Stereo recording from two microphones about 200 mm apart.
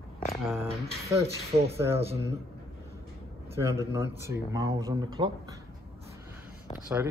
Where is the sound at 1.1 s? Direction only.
30° right (ahead or behind).